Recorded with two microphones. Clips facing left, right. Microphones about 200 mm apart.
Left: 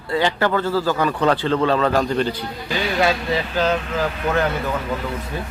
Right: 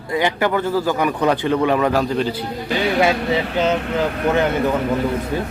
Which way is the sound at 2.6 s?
60° right (ahead or behind).